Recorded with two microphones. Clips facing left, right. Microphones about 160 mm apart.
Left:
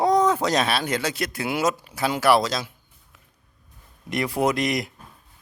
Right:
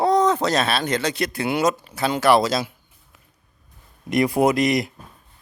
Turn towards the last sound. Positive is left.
turn(degrees=0)  # may be behind; listen again after turning